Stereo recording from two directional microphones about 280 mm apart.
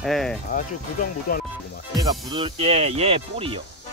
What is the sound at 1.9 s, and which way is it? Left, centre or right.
Speech, centre.